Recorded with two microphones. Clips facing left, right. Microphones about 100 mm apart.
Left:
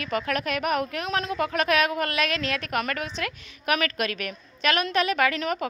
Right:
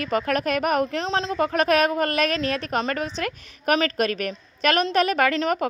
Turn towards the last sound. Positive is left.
turn(degrees=-40)  # may be behind; listen again after turning